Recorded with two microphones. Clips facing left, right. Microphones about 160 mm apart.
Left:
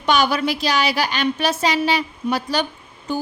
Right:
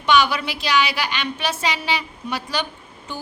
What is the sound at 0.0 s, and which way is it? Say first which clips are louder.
A woman's voice: left 1 dB; 40° left (ahead or behind).